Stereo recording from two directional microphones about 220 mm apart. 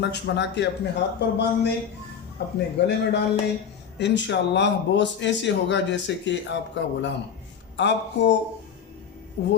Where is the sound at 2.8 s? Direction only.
50° left (ahead or behind).